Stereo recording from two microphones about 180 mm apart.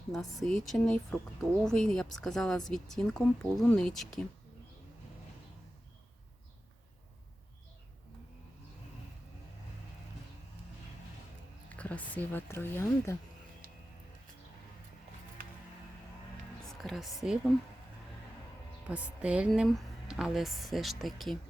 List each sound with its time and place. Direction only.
0.1 s speech: centre (ahead or behind)
11.8 s speech: 10° left (ahead or behind)
13.6 s music: 50° right (ahead or behind)
16.6 s music: centre (ahead or behind)
17.2 s speech: centre (ahead or behind)
18.9 s speech: 5° right (ahead or behind)